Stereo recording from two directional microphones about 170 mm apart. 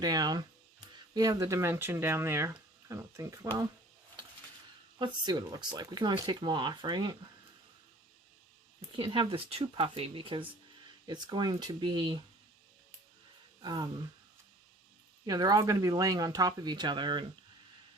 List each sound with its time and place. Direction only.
0.0 s speech: 25° right (ahead or behind)
4.9 s speech: 25° right (ahead or behind)
9.0 s speech: 35° right (ahead or behind)
13.6 s speech: 25° right (ahead or behind)
15.3 s speech: 20° right (ahead or behind)